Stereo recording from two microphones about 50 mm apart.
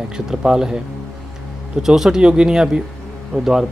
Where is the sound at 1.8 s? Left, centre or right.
Centre.